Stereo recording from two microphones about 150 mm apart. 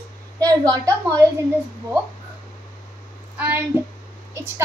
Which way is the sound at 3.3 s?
15° right (ahead or behind).